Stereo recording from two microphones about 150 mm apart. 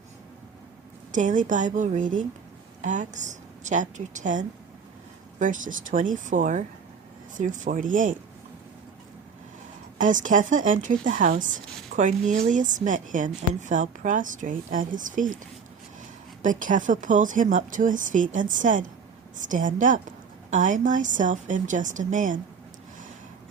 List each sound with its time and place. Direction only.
1.1 s speech: 60° right (ahead or behind)
10.0 s speech: 60° right (ahead or behind)
16.4 s speech: 60° right (ahead or behind)